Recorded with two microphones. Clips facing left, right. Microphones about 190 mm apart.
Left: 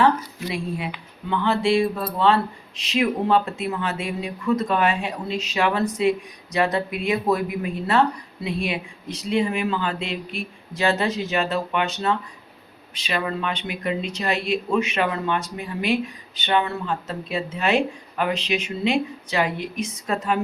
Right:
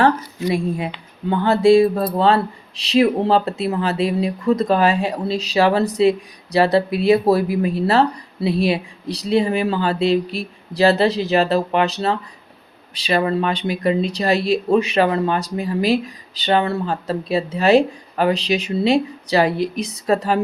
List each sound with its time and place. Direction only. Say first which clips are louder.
0.3 s speech: right 7 dB; 40° right (ahead or behind)